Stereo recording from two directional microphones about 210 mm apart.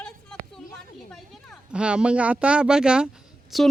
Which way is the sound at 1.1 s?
Centre (ahead or behind).